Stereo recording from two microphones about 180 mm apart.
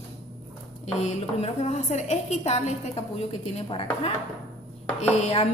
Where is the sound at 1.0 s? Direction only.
40° left (ahead or behind).